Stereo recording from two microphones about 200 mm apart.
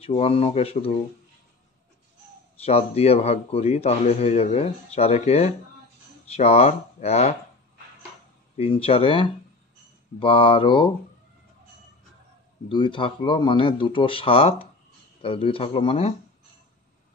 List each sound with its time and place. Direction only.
0.0 s speech: 30° left (ahead or behind)
2.6 s a man's voice: 30° left (ahead or behind)
8.5 s speech: 30° left (ahead or behind)
12.6 s speech: 25° left (ahead or behind)